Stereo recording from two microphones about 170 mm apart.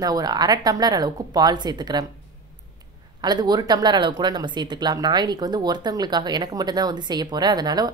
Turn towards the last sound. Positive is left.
turn(degrees=-25)  # may be behind; listen again after turning